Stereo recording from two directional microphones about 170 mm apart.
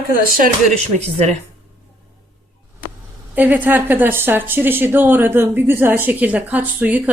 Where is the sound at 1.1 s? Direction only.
40° right (ahead or behind).